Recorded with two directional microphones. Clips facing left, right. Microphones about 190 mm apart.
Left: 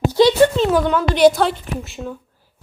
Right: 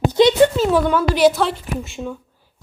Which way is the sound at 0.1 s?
20° right (ahead or behind).